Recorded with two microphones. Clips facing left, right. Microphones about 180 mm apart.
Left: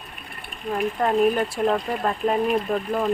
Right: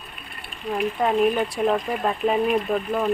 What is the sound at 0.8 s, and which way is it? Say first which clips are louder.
Speech: even; centre (ahead or behind).